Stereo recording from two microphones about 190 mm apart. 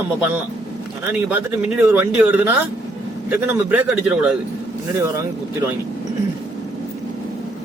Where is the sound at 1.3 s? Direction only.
10° right (ahead or behind).